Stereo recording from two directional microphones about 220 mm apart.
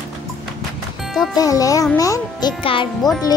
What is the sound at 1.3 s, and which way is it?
A child's voice, 15° left (ahead or behind).